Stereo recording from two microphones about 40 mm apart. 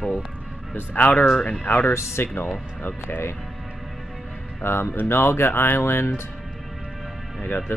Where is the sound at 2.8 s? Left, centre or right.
Left.